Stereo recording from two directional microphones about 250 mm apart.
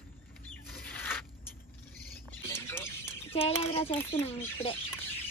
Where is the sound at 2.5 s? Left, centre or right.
Centre.